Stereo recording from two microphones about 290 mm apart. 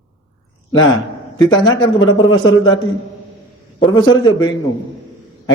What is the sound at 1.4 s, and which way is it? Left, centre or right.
A man's voice, centre.